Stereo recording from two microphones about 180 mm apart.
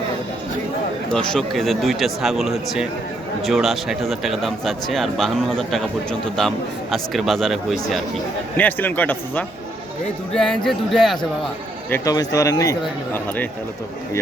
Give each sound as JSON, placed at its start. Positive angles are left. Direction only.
{"t": 1.1, "sound": "a man's voice", "side_deg": 5}
{"t": 11.9, "sound": "speech", "side_deg": 15}